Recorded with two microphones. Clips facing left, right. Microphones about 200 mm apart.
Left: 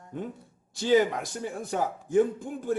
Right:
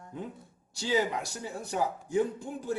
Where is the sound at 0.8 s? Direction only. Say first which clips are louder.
Left 6 dB; 55° left (ahead or behind).